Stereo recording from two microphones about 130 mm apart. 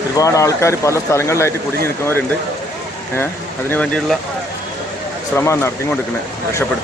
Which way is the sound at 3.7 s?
10° left (ahead or behind).